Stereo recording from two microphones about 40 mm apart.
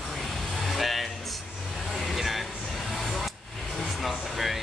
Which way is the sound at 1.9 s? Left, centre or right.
Centre.